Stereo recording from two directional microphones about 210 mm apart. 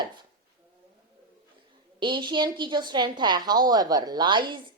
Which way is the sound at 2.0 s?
20° right (ahead or behind).